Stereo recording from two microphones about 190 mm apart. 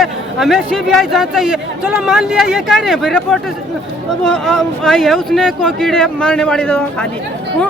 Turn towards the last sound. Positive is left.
turn(degrees=5)  # may be behind; listen again after turning